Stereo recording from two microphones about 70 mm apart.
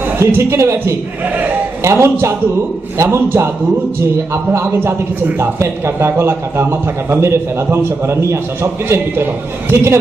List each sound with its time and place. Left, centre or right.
0.2 s a man's voice: right
4.5 s a man's voice: right